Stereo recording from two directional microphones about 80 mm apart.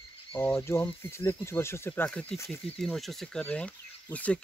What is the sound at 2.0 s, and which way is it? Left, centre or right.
Speech, centre.